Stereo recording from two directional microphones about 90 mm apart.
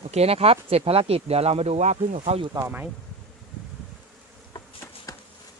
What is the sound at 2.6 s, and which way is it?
Speech, 50° right (ahead or behind).